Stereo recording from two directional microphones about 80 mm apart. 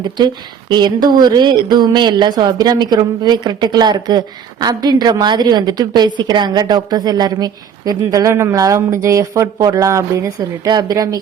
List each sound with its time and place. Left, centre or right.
0.7 s a woman's voice: right
10.7 s a woman's voice: right